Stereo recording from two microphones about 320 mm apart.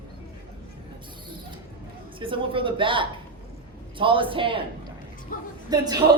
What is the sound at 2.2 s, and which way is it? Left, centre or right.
A man's voice, centre.